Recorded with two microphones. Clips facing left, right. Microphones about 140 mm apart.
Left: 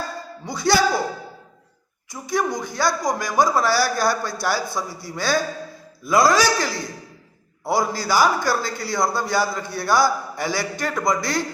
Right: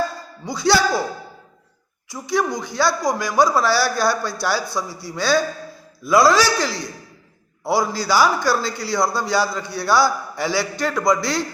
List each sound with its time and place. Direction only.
0.4 s a man's voice: 50° left (ahead or behind)
2.0 s a man's voice: 50° left (ahead or behind)